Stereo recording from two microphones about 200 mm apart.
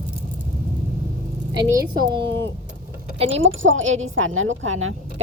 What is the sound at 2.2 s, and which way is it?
Speech, 60° right (ahead or behind).